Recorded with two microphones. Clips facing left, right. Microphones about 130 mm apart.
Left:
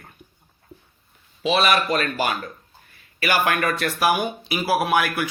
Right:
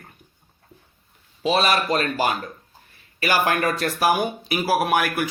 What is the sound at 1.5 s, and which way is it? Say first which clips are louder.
A man's voice: even; 35° right (ahead or behind).